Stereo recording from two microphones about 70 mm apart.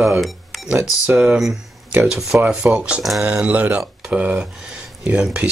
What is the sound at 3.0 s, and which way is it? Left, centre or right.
Speech, centre.